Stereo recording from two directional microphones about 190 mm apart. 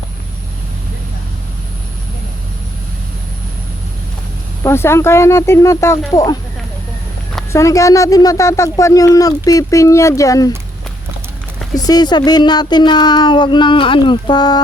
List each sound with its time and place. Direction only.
4.6 s speech: 15° left (ahead or behind)
7.5 s speech: 15° left (ahead or behind)
11.8 s speech: 20° left (ahead or behind)